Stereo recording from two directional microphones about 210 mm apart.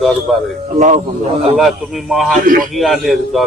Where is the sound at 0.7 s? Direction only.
35° right (ahead or behind).